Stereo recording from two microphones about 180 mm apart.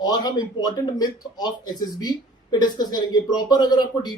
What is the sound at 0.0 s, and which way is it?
A man's voice, 20° left (ahead or behind).